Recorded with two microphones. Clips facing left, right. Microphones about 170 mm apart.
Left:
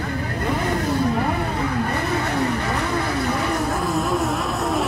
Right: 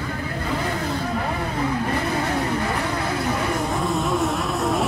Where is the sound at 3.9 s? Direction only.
Centre (ahead or behind).